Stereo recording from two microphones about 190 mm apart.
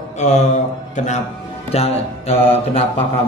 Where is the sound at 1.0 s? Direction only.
40° left (ahead or behind).